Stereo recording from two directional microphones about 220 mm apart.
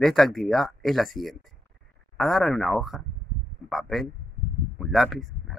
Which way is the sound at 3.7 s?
Centre (ahead or behind).